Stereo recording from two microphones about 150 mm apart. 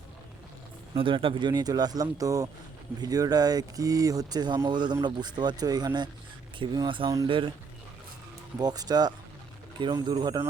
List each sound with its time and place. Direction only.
0.9 s speech: 35° right (ahead or behind)
8.5 s speech: 25° right (ahead or behind)